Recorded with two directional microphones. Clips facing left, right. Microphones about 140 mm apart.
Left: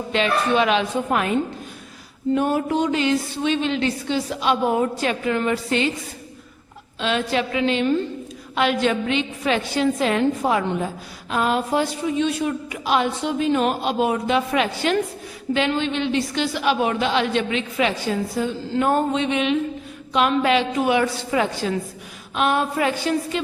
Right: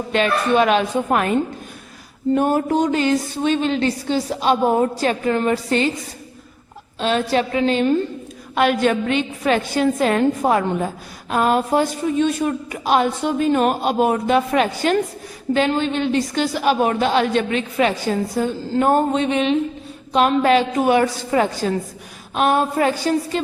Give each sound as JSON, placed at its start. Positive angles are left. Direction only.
{"t": 0.1, "sound": "a woman's voice", "side_deg": -45}
{"t": 7.0, "sound": "a woman's voice", "side_deg": -40}